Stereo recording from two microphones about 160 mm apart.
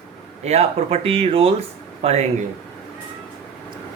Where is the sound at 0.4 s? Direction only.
40° right (ahead or behind).